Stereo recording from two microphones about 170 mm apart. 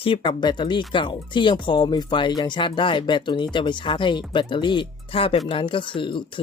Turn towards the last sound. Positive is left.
turn(degrees=30)  # may be behind; listen again after turning